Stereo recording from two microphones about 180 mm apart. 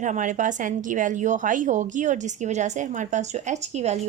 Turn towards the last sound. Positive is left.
turn(degrees=-40)  # may be behind; listen again after turning